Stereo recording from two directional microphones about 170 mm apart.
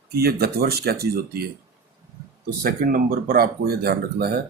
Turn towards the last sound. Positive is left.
turn(degrees=-70)  # may be behind; listen again after turning